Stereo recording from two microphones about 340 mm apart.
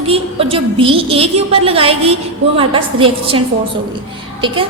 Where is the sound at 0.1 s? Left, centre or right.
Centre.